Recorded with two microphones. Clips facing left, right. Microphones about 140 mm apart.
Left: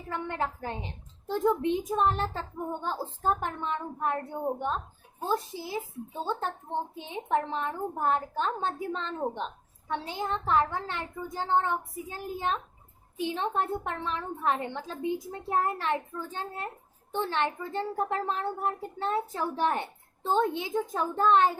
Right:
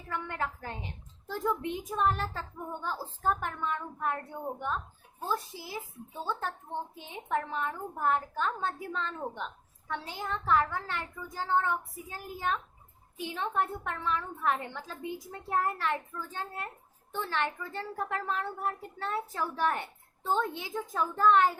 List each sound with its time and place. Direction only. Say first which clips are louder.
0.1 s a child's voice: left 3 dB; 25° left (ahead or behind)